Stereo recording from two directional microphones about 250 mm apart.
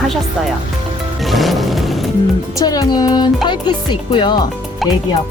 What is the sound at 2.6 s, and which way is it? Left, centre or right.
Speech, centre.